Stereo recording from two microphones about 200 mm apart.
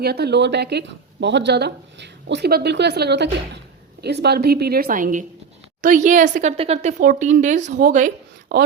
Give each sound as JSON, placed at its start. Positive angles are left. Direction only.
{"t": 0.0, "sound": "a woman's voice", "side_deg": -55}